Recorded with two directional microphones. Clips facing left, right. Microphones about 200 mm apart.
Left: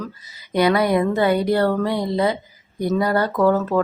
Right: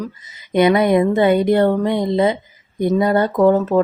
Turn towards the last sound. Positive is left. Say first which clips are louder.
# right 4 dB
turn(degrees=-20)  # may be behind; listen again after turning